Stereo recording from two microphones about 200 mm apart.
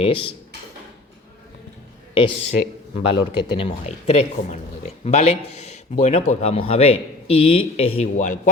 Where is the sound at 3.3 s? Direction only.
25° left (ahead or behind).